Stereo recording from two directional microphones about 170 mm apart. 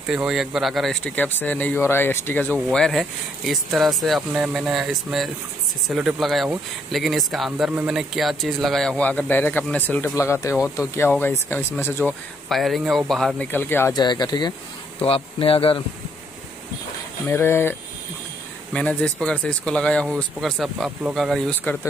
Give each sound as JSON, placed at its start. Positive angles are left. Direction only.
{"t": 0.1, "sound": "speech", "side_deg": -5}
{"t": 2.7, "sound": "speech", "side_deg": 0}
{"t": 13.5, "sound": "speech", "side_deg": 10}
{"t": 13.9, "sound": "speech", "side_deg": 25}
{"t": 17.3, "sound": "speech", "side_deg": 15}